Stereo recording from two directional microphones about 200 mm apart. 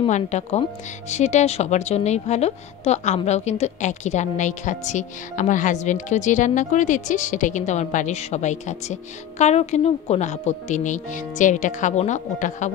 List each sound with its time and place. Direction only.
0.0 s a woman's voice: 35° left (ahead or behind)